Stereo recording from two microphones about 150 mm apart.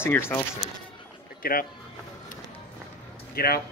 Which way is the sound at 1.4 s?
80° left.